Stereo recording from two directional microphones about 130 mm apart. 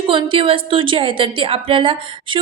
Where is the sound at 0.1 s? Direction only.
40° right (ahead or behind).